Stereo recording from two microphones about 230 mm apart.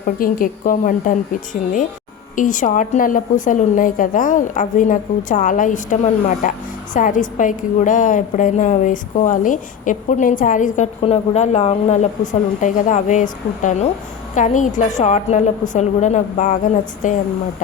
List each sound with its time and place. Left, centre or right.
0.0 s a woman's voice: left
2.3 s a woman's voice: left